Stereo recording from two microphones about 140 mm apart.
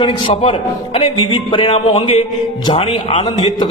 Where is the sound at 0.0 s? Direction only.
35° left (ahead or behind).